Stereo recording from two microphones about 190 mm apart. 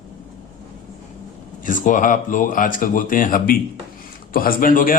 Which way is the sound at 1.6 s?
45° left (ahead or behind).